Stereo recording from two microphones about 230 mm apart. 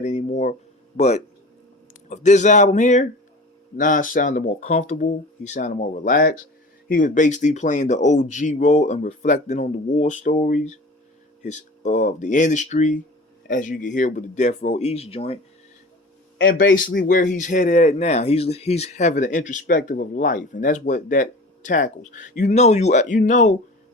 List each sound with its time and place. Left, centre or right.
0.0 s a sound: left
0.9 s a man's voice: left
16.4 s speech: left